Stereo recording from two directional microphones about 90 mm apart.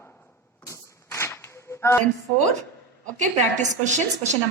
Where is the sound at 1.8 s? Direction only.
30° left (ahead or behind).